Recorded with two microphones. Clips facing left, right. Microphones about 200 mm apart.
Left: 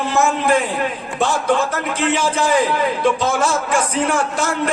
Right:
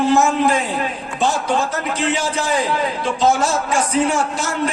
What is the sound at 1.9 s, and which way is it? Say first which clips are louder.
A man's voice: left 2 dB; 55° left (ahead or behind).